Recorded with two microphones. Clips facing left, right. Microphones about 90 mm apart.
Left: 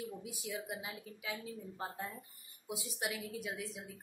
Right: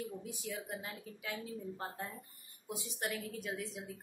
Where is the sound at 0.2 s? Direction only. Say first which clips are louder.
Even; 10° left (ahead or behind).